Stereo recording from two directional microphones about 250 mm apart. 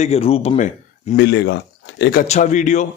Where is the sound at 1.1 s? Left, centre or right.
Left.